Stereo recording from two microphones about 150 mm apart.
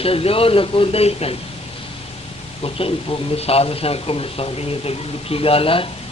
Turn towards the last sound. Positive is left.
turn(degrees=35)  # may be behind; listen again after turning